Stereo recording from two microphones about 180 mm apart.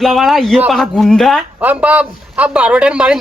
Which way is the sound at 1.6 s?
10° right (ahead or behind).